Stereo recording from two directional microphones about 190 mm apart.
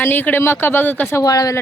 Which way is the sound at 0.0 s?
10° left (ahead or behind).